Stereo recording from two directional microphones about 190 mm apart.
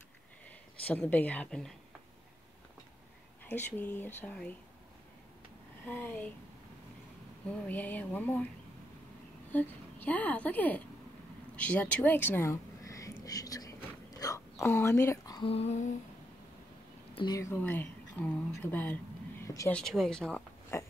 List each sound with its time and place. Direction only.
0.8 s a woman's voice: 10° left (ahead or behind)
3.4 s a woman's voice: 10° left (ahead or behind)
5.9 s a woman's voice: 10° left (ahead or behind)
7.5 s a woman's voice: 10° left (ahead or behind)
9.5 s a woman's voice: 10° left (ahead or behind)
15.5 s a sound: 35° left (ahead or behind)
17.1 s a woman's voice: 20° left (ahead or behind)
19.4 s a sound: 15° left (ahead or behind)
19.7 s speech: centre (ahead or behind)